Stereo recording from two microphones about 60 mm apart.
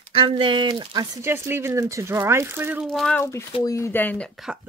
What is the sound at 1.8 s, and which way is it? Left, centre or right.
Speech, right.